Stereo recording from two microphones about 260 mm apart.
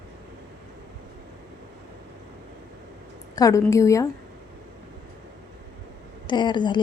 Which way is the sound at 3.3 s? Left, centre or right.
Centre.